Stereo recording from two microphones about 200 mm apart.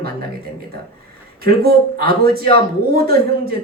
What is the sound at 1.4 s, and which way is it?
A man's voice, 50° right (ahead or behind).